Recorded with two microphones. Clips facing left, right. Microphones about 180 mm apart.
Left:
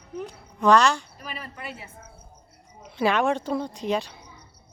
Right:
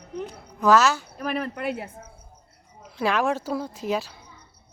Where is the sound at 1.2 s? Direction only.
65° right (ahead or behind).